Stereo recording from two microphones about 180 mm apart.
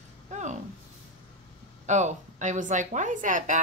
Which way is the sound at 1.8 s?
40° right (ahead or behind).